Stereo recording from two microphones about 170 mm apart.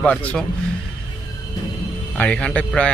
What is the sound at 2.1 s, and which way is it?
Speech, 10° left (ahead or behind).